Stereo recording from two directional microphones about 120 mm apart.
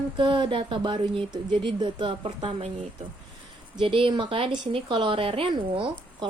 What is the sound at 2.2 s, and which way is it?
Speech, 55° right (ahead or behind).